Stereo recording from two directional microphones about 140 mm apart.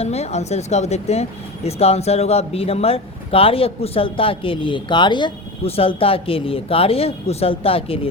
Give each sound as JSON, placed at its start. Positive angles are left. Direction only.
{"t": 0.0, "sound": "speech", "side_deg": 50}